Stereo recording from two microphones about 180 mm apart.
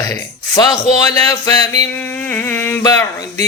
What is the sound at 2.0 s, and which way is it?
Mantra, 10° left (ahead or behind).